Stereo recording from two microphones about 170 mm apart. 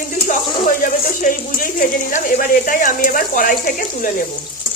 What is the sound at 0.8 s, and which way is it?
Speech, 55° left (ahead or behind).